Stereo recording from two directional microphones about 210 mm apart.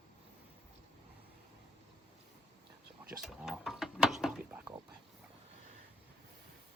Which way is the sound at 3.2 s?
Centre (ahead or behind).